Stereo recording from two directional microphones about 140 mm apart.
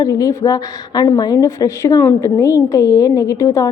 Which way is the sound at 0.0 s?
25° left (ahead or behind).